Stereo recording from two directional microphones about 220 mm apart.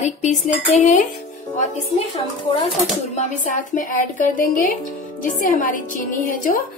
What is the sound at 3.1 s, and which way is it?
Speech, 35° left (ahead or behind).